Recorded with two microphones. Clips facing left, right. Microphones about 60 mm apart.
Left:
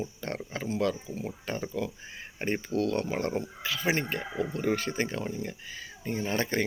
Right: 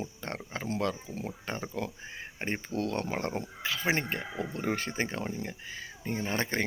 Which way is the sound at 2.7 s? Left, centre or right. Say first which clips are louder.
Left 3 dB; right.